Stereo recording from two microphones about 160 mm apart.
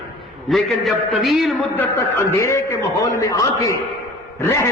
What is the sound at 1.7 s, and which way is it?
A man's voice, 15° left (ahead or behind).